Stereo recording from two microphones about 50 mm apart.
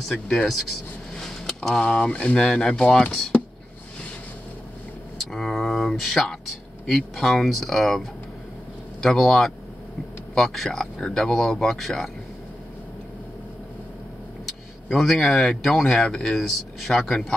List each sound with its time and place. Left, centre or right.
0.0 s speech: centre
1.1 s a sound: centre
1.9 s speech: centre
3.1 s speech: centre
5.3 s speech: centre
9.0 s speech: centre
14.9 s speech: centre